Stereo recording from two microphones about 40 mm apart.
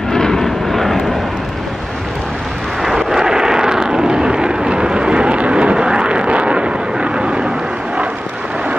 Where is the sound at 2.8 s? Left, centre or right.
Centre; by 7.4 s right.